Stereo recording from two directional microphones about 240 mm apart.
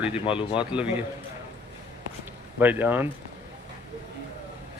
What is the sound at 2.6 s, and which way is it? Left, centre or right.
Speech, centre.